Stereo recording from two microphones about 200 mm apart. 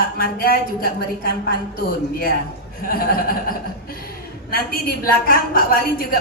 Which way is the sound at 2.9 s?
45° left (ahead or behind).